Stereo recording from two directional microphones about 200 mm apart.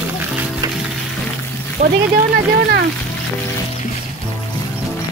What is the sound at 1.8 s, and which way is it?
Speech, 35° right (ahead or behind).